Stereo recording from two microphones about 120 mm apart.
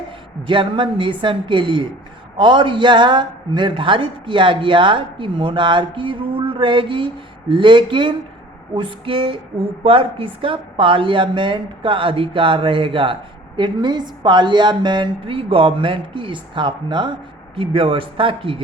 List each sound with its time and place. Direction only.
0.4 s a man's voice: 45° right (ahead or behind)